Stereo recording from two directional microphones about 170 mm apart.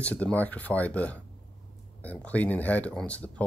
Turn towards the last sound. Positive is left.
turn(degrees=10)  # may be behind; listen again after turning